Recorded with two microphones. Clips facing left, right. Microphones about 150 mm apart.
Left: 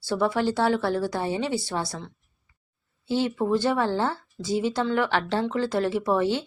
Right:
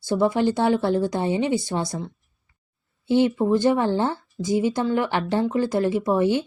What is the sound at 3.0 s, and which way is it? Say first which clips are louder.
A woman's voice: right 5 dB; 15° right (ahead or behind).